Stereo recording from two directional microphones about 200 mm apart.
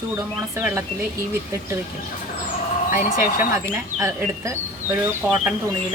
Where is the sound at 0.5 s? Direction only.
10° right (ahead or behind).